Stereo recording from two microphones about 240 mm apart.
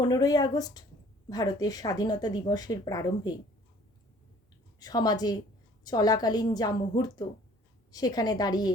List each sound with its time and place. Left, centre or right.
0.0 s speech: centre
4.8 s speech: centre